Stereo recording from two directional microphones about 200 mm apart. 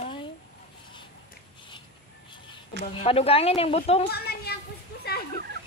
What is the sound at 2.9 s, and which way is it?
Speech, 30° left (ahead or behind).